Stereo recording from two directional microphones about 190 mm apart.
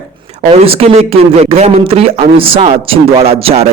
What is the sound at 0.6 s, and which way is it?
A man's voice, 30° right (ahead or behind).